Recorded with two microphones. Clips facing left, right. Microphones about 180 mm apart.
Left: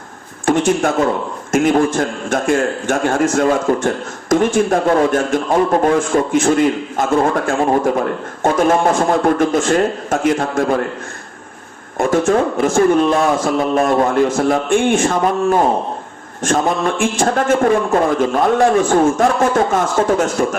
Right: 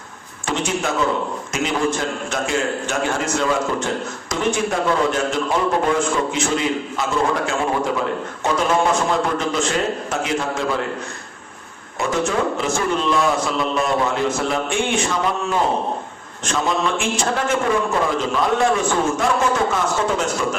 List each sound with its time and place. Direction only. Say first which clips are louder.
0.4 s a man's voice: left 8 dB; 50° left (ahead or behind)
11.9 s a man's voice: left 7 dB; 50° left (ahead or behind)